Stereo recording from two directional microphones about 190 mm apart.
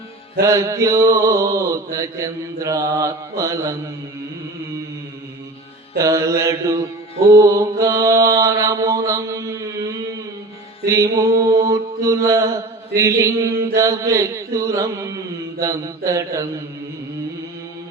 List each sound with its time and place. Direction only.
0.4 s mantra: 15° right (ahead or behind)
6.0 s mantra: 15° right (ahead or behind)
10.8 s mantra: 15° right (ahead or behind)